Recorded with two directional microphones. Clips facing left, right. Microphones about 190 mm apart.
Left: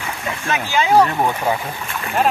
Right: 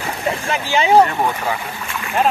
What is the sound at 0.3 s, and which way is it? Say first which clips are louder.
Speech: right 2 dB; 30° right (ahead or behind).